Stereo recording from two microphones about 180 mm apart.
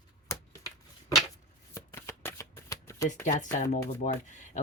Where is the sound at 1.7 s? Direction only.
15° left (ahead or behind).